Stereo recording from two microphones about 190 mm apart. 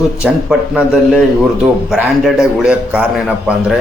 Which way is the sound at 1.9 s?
Centre (ahead or behind).